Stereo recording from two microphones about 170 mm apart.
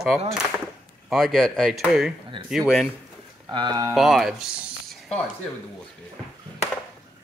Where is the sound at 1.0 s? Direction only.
Centre (ahead or behind).